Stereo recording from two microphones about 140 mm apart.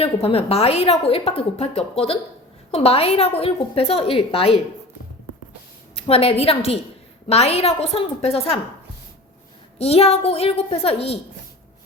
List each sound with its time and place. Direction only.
0.0 s a woman's voice: 45° left (ahead or behind)
6.0 s a woman's voice: 45° left (ahead or behind)
9.8 s a woman's voice: 45° left (ahead or behind)